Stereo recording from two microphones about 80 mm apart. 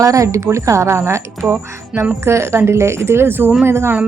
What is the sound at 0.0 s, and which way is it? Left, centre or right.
A woman's voice, right.